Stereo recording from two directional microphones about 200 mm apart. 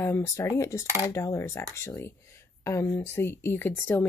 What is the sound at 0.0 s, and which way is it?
Speech, 15° left (ahead or behind).